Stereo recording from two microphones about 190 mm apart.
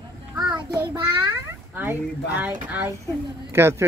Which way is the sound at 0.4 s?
20° right (ahead or behind).